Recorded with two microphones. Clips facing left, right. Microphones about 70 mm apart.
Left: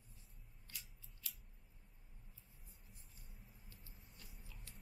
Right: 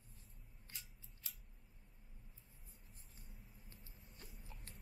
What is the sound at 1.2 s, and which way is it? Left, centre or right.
Scissors, right.